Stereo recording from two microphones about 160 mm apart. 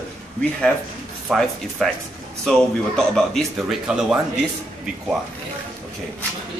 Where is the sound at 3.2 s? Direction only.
Centre (ahead or behind).